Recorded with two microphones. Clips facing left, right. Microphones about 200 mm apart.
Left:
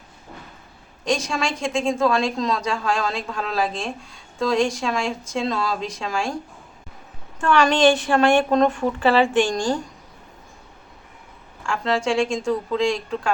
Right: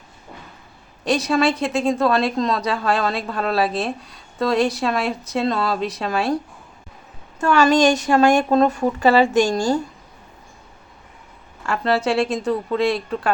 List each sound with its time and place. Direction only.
1.0 s speech: 5° right (ahead or behind)
7.4 s a woman's voice: 5° right (ahead or behind)
7.7 s speech: 40° right (ahead or behind)
9.5 s a woman's voice: 5° right (ahead or behind)
11.6 s speech: 5° right (ahead or behind)